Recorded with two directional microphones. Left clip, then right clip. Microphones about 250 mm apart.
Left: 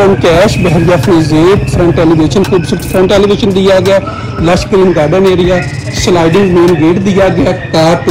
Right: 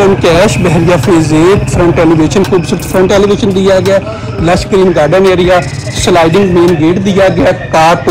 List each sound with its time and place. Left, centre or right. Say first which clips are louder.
0.0 s speech: even; centre
5.1 s a man's voice: right 1 dB; centre
6.0 s speech: right 1 dB; centre